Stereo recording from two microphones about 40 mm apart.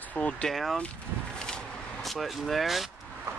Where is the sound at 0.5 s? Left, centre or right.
Centre.